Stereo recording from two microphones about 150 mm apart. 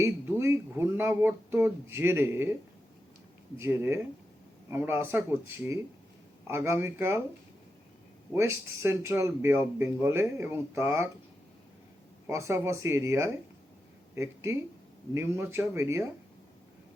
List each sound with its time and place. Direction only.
0.0 s speech: 15° right (ahead or behind)
3.6 s speech: 15° right (ahead or behind)
6.5 s speech: 15° right (ahead or behind)
8.3 s speech: 15° right (ahead or behind)
12.3 s speech: 20° right (ahead or behind)